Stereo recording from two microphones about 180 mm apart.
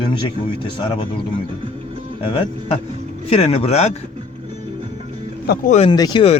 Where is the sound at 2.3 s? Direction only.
30° left (ahead or behind).